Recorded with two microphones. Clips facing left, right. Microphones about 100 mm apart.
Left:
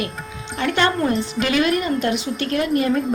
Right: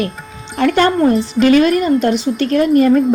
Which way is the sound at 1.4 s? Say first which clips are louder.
Right 9 dB; 45° right (ahead or behind).